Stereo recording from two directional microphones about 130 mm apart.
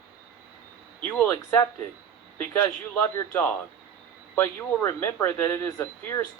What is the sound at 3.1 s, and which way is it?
Speech, 15° left (ahead or behind).